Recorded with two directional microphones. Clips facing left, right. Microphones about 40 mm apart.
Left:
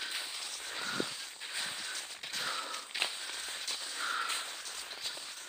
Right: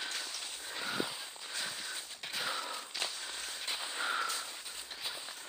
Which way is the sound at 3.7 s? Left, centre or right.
Centre.